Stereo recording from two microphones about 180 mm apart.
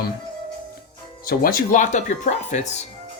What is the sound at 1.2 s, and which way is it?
Speech, 55° left (ahead or behind).